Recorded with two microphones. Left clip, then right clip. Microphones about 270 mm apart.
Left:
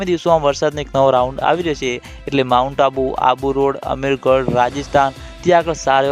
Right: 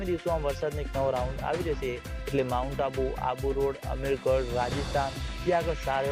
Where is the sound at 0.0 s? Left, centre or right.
Left.